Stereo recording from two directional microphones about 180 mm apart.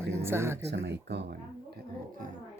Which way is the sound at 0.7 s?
70° right (ahead or behind).